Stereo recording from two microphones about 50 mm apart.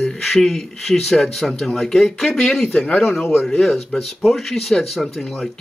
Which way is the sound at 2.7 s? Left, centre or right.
Left.